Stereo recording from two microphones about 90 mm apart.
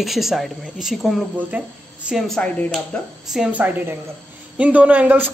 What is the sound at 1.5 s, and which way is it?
Speech, 20° right (ahead or behind).